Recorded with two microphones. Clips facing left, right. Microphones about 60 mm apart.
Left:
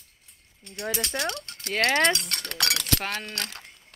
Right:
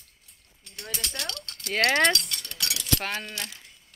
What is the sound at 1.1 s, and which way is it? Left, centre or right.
Speech, left.